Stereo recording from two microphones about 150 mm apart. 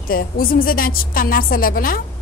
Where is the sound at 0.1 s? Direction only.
75° left (ahead or behind).